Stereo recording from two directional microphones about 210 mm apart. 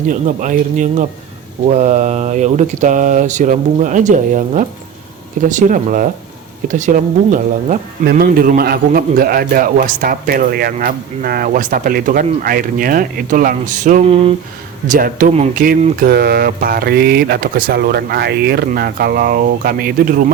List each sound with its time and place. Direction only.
0.1 s speech: 40° right (ahead or behind)
14.8 s speech: 40° right (ahead or behind)